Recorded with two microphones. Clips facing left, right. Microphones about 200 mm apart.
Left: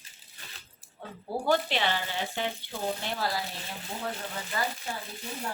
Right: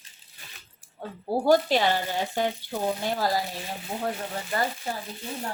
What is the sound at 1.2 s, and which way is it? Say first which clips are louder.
Speech: right 6 dB; 40° right (ahead or behind).